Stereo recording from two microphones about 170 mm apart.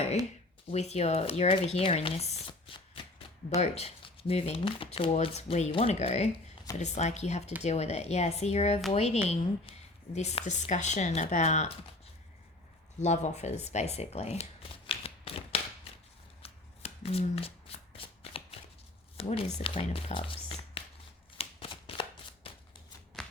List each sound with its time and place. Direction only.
0.7 s speech: 40° left (ahead or behind)
2.5 s shuffling cards: 30° left (ahead or behind)
3.5 s speech: 40° left (ahead or behind)
13.0 s speech: 45° left (ahead or behind)
16.4 s shuffling cards: 35° left (ahead or behind)
19.1 s speech: 35° left (ahead or behind)
21.3 s shuffling cards: 35° left (ahead or behind)
23.2 s a sound: 5° left (ahead or behind)